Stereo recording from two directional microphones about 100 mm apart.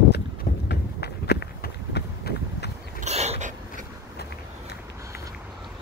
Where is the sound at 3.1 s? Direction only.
90° right.